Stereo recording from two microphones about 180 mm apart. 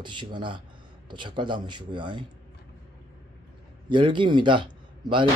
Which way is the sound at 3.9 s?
25° right (ahead or behind).